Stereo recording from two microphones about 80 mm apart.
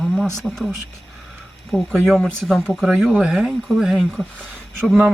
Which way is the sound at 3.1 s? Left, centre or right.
Centre.